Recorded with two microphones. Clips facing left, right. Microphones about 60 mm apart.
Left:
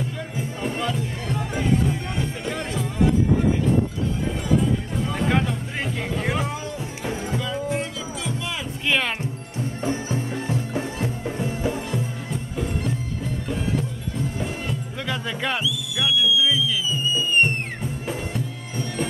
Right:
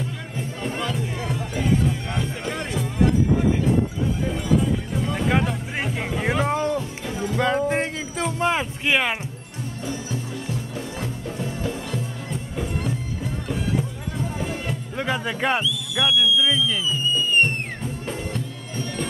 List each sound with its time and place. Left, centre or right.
0.7 s music: centre
4.9 s music: centre
5.9 s music: centre
6.4 s music: right
8.8 s music: centre
9.8 s music: left
12.3 s music: centre
15.0 s music: right
15.6 s a sound: centre